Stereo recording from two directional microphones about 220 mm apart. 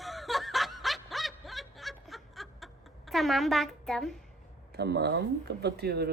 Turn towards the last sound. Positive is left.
turn(degrees=-45)  # may be behind; listen again after turning